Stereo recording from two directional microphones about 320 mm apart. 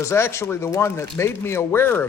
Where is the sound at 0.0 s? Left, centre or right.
Centre.